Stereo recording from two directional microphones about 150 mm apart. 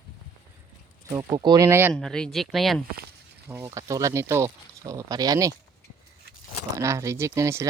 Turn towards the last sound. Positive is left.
turn(degrees=-20)  # may be behind; listen again after turning